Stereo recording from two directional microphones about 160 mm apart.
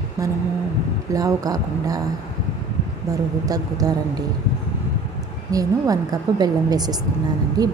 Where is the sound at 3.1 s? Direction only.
20° right (ahead or behind).